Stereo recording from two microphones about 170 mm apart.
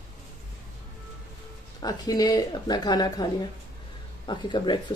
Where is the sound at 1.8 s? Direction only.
20° left (ahead or behind).